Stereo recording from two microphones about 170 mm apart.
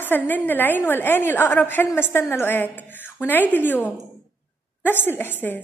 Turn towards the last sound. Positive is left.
turn(degrees=10)  # may be behind; listen again after turning